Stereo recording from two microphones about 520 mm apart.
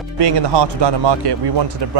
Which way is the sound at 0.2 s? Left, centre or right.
Right.